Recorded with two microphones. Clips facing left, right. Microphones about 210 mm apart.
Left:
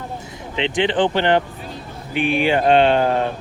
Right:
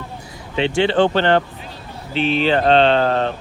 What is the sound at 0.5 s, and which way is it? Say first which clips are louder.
Speech: right 3 dB; 20° left (ahead or behind).